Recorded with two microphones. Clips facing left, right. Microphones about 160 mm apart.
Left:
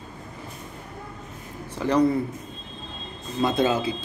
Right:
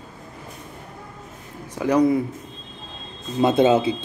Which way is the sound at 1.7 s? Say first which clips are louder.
Right 3 dB; 10° right (ahead or behind).